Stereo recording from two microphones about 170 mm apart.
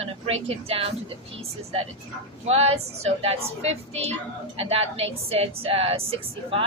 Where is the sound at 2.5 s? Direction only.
40° right (ahead or behind).